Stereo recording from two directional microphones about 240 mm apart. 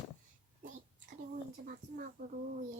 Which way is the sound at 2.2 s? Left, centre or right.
Right.